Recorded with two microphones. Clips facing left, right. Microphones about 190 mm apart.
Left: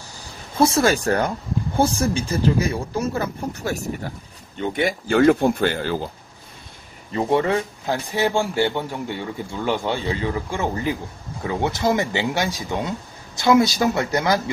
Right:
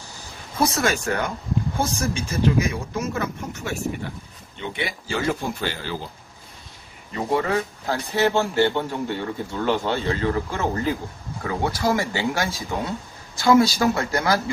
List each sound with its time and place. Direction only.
0.6 s speech: 30° left (ahead or behind); by 5.9 s 50° left (ahead or behind)
7.2 s speech: 25° left (ahead or behind)